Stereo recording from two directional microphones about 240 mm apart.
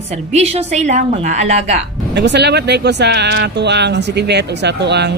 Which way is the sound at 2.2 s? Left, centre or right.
Right.